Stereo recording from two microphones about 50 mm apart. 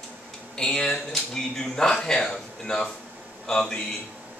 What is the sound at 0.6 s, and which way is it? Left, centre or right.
Speech, centre.